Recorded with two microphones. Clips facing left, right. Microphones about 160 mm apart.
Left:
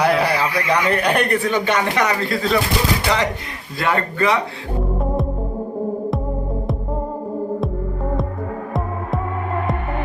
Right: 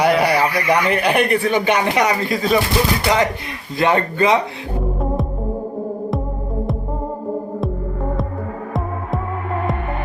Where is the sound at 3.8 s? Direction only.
20° right (ahead or behind).